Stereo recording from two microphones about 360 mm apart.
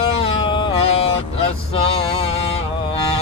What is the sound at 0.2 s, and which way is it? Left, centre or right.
Music, centre.